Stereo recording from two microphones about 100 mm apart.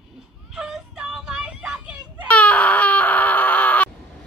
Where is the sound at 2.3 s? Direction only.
15° left (ahead or behind).